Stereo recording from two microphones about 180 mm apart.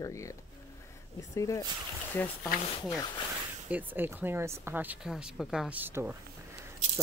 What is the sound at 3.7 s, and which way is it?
Speech, 10° right (ahead or behind).